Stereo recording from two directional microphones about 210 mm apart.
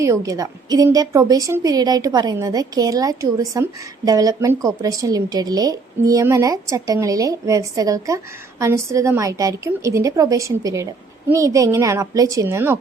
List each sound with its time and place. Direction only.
0.0 s a woman's voice: 15° right (ahead or behind)